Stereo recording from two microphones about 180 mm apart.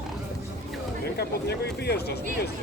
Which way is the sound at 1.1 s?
65° left (ahead or behind).